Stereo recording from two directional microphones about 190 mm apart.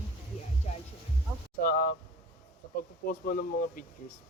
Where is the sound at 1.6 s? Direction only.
50° left (ahead or behind).